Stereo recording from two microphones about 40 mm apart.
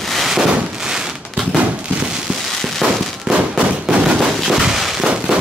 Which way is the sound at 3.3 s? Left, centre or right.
Right.